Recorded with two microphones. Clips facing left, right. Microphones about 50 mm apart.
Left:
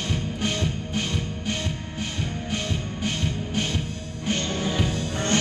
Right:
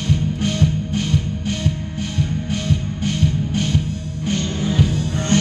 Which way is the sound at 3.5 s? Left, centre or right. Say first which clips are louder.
Right 6 dB; centre.